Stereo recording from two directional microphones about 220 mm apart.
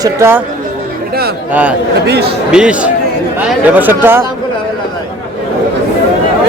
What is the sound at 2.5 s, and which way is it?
A man's voice, 5° right (ahead or behind).